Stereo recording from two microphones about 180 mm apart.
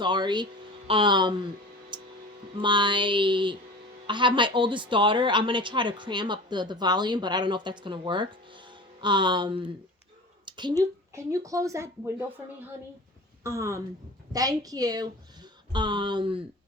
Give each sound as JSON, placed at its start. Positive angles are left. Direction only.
{"t": 0.0, "sound": "a woman's voice", "side_deg": -25}
{"t": 1.9, "sound": "a sound", "side_deg": -25}
{"t": 2.6, "sound": "a woman's voice", "side_deg": -25}
{"t": 10.4, "sound": "a sound", "side_deg": -25}
{"t": 11.1, "sound": "speech", "side_deg": -15}
{"t": 13.4, "sound": "a woman's voice", "side_deg": -15}